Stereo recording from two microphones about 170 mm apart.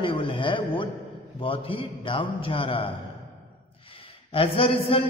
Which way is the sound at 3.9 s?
35° left (ahead or behind).